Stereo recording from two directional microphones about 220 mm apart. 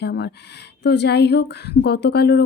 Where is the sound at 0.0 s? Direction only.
50° left (ahead or behind).